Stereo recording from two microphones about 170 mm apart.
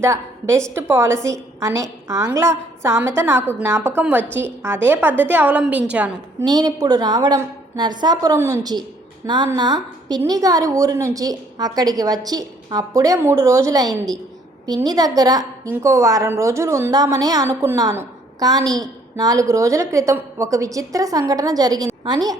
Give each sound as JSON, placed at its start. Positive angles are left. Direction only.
{"t": 0.0, "sound": "a woman's voice", "side_deg": -15}
{"t": 6.4, "sound": "a woman's voice", "side_deg": -25}